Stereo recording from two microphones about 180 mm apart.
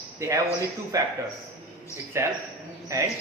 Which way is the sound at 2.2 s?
15° right (ahead or behind).